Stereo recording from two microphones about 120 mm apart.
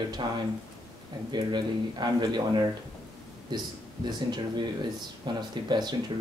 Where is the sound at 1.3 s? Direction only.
35° right (ahead or behind).